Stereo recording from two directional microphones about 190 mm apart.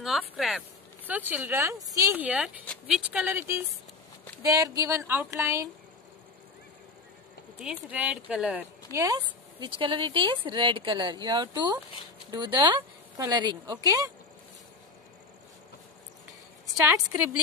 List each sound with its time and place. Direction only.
0.0 s speech: centre (ahead or behind)
7.6 s speech: 5° right (ahead or behind)